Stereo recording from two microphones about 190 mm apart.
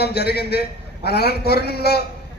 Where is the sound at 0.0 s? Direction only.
60° left (ahead or behind).